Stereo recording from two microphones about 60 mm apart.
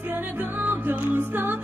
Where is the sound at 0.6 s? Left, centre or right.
Right.